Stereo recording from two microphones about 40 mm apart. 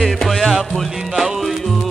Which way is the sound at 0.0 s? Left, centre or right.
Centre.